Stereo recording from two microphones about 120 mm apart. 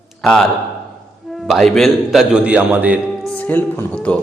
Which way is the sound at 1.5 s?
Centre (ahead or behind).